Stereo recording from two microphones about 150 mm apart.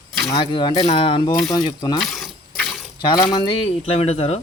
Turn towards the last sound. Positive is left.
turn(degrees=45)  # may be behind; listen again after turning